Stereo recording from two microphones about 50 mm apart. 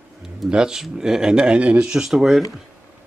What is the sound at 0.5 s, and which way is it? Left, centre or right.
Speech, centre.